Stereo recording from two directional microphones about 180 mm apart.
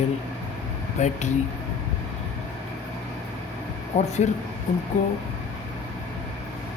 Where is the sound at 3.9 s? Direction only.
40° left (ahead or behind).